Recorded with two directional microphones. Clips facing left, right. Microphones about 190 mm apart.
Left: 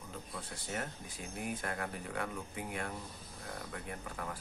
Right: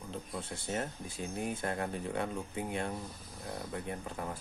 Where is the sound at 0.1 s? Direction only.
25° right (ahead or behind).